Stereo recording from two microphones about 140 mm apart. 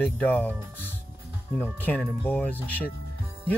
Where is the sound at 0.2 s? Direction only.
10° left (ahead or behind).